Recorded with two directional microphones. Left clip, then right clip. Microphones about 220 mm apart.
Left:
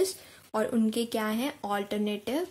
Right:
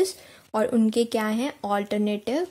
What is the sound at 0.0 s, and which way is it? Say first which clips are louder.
Speech: right 4 dB; 30° right (ahead or behind).